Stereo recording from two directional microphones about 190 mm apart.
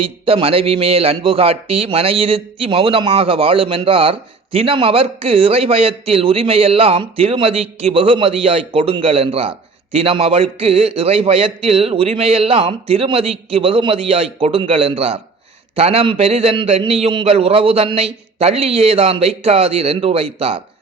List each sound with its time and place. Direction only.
0.3 s a man's voice: 30° right (ahead or behind)